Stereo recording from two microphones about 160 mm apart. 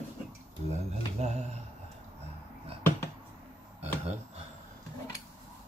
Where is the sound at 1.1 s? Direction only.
45° right (ahead or behind).